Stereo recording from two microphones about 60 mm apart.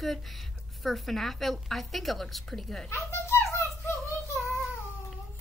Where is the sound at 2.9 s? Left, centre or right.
Left.